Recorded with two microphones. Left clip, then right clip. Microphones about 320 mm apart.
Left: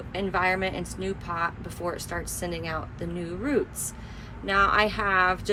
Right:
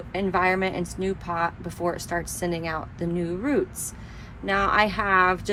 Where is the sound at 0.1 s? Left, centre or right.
Centre.